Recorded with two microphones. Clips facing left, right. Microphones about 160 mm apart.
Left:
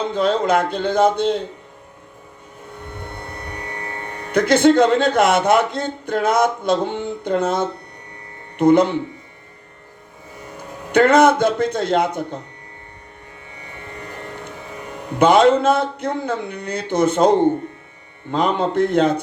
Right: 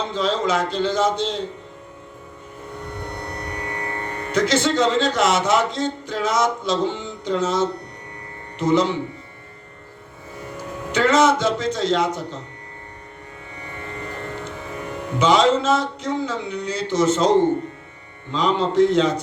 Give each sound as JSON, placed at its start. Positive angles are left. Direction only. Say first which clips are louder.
{"t": 0.0, "sound": "a man's voice", "louder": "left 3 dB", "side_deg": 55}
{"t": 4.3, "sound": "a man's voice", "louder": "left 6 dB", "side_deg": 55}
{"t": 10.9, "sound": "a man's voice", "louder": "left 4 dB", "side_deg": 55}
{"t": 15.2, "sound": "a man's voice", "louder": "left 4 dB", "side_deg": 55}